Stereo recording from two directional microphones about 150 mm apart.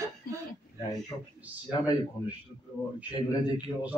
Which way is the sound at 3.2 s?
30° left (ahead or behind).